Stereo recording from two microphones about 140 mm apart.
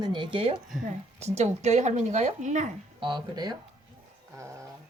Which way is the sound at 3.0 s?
35° right (ahead or behind).